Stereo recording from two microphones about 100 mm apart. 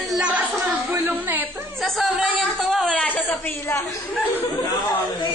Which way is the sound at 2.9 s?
15° left (ahead or behind).